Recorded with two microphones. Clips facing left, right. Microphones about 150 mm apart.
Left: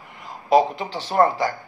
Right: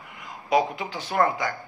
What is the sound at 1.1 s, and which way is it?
Speech, 35° left (ahead or behind).